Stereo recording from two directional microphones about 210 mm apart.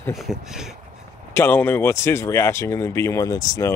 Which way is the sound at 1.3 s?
10° left (ahead or behind).